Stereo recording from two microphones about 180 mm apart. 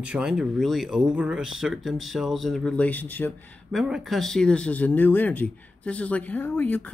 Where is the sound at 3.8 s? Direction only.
Centre (ahead or behind).